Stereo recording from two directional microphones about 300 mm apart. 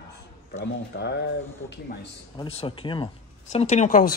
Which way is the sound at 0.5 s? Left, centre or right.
Left.